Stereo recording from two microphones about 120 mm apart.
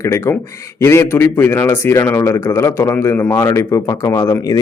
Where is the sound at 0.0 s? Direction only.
25° left (ahead or behind).